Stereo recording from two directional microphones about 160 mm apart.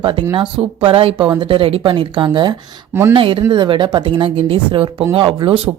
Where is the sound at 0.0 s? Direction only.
30° right (ahead or behind).